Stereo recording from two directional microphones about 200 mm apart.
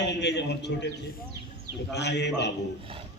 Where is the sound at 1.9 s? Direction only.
60° left (ahead or behind).